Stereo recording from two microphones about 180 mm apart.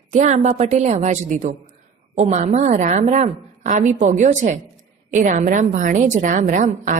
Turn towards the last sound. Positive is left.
turn(degrees=-45)  # may be behind; listen again after turning